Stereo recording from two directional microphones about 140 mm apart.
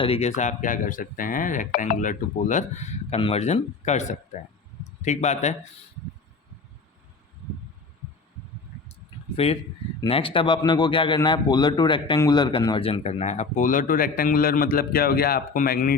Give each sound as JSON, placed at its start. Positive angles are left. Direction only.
{"t": 0.0, "sound": "a man's voice", "side_deg": 45}
{"t": 9.3, "sound": "speech", "side_deg": 45}